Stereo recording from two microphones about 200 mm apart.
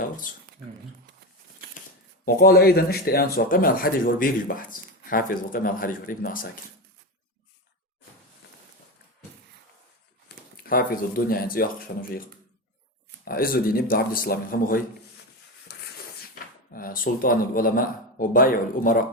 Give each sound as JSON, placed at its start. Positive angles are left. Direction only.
{"t": 2.2, "sound": "speech", "side_deg": 50}
{"t": 10.2, "sound": "speech", "side_deg": 50}
{"t": 13.2, "sound": "speech", "side_deg": 45}
{"t": 15.7, "sound": "a sound", "side_deg": 55}
{"t": 16.3, "sound": "speech", "side_deg": 45}